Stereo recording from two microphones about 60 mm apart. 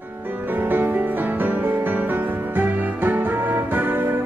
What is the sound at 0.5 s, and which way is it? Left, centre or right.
Music, right.